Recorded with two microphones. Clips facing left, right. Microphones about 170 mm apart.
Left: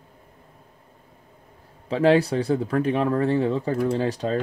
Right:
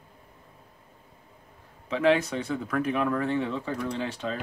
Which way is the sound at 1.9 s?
35° left (ahead or behind).